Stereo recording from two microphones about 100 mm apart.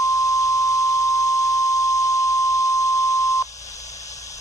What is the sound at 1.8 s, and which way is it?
Beep, 30° left (ahead or behind).